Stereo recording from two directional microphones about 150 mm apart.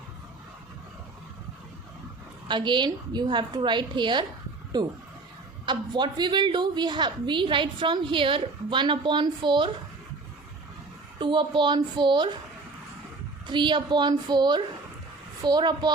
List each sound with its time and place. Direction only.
2.5 s a woman's voice: 30° right (ahead or behind)
11.2 s a woman's voice: 35° right (ahead or behind)
13.5 s a woman's voice: 30° right (ahead or behind)